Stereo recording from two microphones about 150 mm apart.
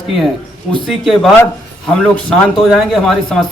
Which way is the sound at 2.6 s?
Centre (ahead or behind).